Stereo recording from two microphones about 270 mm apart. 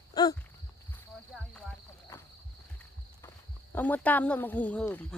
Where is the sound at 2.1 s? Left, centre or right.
Centre.